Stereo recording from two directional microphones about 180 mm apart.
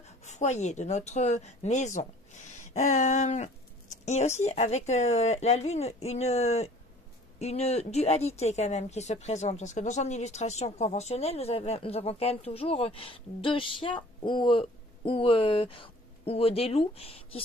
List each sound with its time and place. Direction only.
0.2 s a woman's voice: 40° left (ahead or behind)